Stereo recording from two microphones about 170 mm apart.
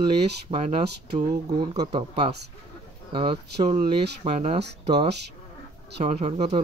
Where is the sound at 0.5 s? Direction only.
35° right (ahead or behind).